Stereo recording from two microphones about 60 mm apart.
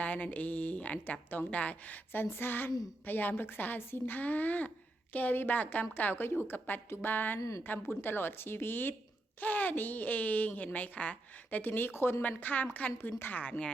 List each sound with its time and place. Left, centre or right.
0.0 s speech: left
2.3 s a woman's voice: left
13.0 s a woman's voice: left
13.4 s speech: left